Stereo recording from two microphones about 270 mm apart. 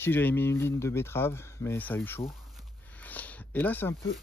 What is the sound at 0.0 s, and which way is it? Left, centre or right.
Speech, centre.